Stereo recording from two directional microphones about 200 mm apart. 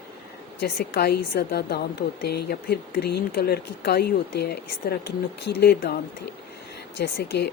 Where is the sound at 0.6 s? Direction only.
50° left (ahead or behind).